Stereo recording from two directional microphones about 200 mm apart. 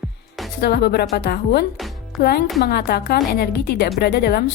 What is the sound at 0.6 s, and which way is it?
A woman's voice, 55° left (ahead or behind).